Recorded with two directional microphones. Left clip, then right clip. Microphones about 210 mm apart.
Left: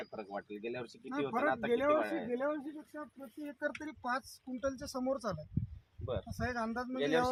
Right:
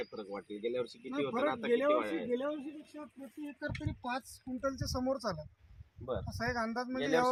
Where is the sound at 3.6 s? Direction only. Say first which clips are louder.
Left 3 dB; 10° right (ahead or behind).